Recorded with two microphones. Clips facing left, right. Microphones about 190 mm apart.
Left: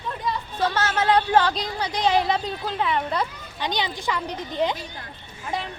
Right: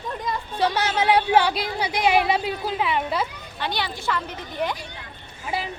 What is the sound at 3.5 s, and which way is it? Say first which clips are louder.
A child's voice: left 1 dB; 15° left (ahead or behind).